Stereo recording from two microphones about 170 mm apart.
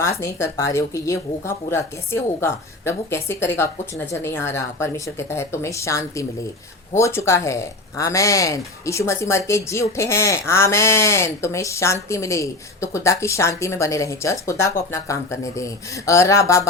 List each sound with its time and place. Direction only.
0.0 s speech: 15° left (ahead or behind)